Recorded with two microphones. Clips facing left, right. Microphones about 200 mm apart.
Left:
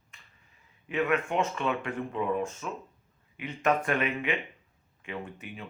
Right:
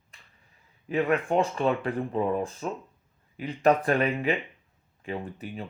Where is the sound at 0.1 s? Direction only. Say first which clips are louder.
Right 1 dB; 35° right (ahead or behind).